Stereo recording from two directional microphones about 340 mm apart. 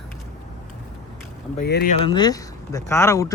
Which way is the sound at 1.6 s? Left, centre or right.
Left.